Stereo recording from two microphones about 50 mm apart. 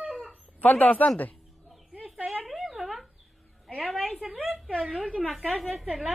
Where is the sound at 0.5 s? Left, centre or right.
Left.